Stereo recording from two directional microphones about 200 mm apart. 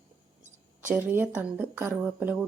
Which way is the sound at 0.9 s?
10° right (ahead or behind).